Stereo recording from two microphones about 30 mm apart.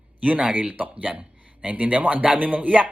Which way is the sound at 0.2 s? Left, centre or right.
Right.